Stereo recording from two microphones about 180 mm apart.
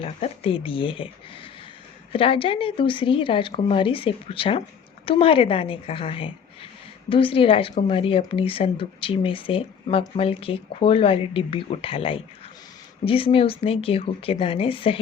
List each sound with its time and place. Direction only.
0.0 s speech: 30° left (ahead or behind)